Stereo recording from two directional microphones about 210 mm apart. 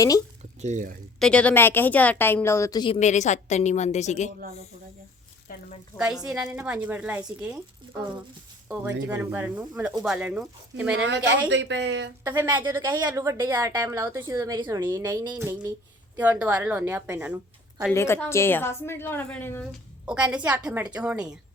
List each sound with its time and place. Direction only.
0.6 s speech: 35° right (ahead or behind)
1.2 s a woman's voice: 5° left (ahead or behind); by 3.0 s 20° left (ahead or behind)
3.0 s a woman's voice: 35° left (ahead or behind)
5.5 s a woman's voice: 45° left (ahead or behind)
6.0 s a woman's voice: centre (ahead or behind)
8.7 s a woman's voice: 10° right (ahead or behind)
10.9 s a woman's voice: 60° right (ahead or behind)
12.2 s a woman's voice: 10° right (ahead or behind)
17.9 s a woman's voice: 10° left (ahead or behind)
20.1 s a woman's voice: 5° right (ahead or behind)